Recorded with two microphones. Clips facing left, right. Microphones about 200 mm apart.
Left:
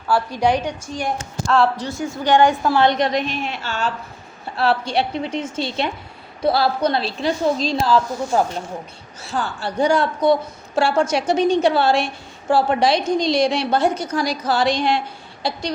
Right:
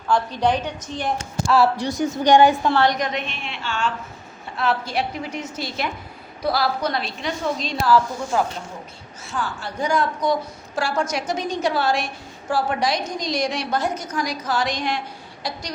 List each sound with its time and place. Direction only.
0.1 s a woman's voice: 10° left (ahead or behind)
1.5 s a woman's voice: 5° right (ahead or behind)
2.7 s a woman's voice: 25° left (ahead or behind)